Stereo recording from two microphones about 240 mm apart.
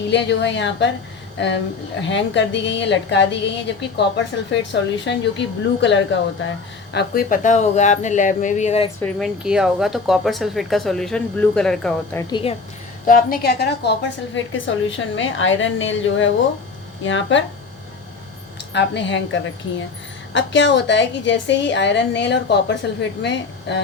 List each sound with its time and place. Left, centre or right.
0.1 s a woman's voice: left
2.0 s a woman's voice: left
6.9 s speech: left
9.0 s speech: centre
12.3 s a woman's voice: left
13.1 s a woman's voice: left
18.7 s a woman's voice: left